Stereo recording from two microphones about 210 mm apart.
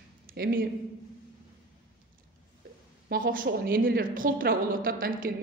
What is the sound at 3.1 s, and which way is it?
Speech, 40° right (ahead or behind).